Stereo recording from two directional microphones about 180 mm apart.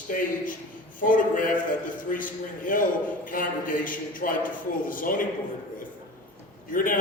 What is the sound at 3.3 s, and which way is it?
A man's voice, 50° left (ahead or behind).